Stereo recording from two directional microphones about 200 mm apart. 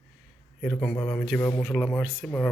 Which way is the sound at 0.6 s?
5° left (ahead or behind).